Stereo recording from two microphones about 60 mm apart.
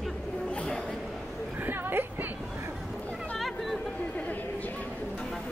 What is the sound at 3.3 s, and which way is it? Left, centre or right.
Chatter, centre.